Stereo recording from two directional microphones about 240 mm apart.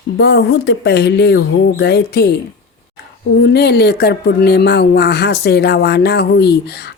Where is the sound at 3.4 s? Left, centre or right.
Left.